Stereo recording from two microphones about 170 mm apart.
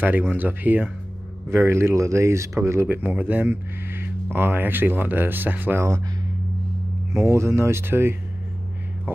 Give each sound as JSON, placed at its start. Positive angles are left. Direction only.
{"t": 0.3, "sound": "speech", "side_deg": -10}
{"t": 7.1, "sound": "speech", "side_deg": -15}